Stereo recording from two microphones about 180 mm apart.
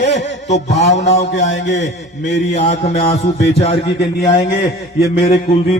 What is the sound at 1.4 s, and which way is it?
Speech, 90° left.